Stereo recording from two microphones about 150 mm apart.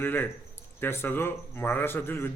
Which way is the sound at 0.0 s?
15° left (ahead or behind).